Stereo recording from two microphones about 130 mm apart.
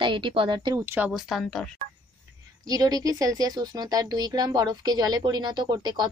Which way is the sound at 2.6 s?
30° right (ahead or behind).